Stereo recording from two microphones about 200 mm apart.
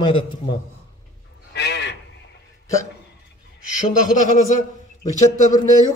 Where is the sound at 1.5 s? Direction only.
55° left (ahead or behind).